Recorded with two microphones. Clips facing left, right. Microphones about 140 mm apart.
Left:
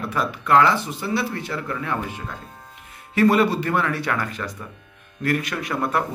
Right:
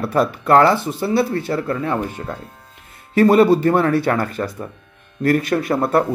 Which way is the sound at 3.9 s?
30° right (ahead or behind).